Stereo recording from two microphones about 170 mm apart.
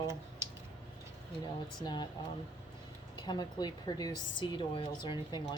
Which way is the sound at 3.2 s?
25° left (ahead or behind).